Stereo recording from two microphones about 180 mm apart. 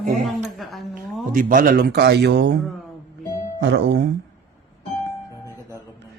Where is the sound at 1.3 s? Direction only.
50° right (ahead or behind); by 2.5 s 70° right (ahead or behind).